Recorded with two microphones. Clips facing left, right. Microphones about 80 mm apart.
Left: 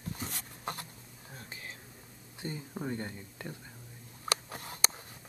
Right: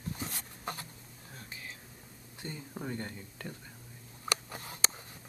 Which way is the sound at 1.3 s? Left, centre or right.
Left.